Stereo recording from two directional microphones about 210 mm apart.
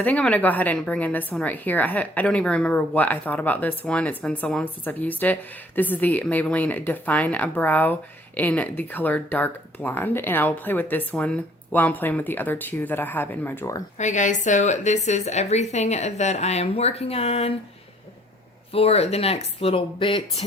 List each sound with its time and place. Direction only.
0.0 s a woman's voice: 5° left (ahead or behind)
14.0 s speech: 35° left (ahead or behind)
18.7 s speech: 30° left (ahead or behind)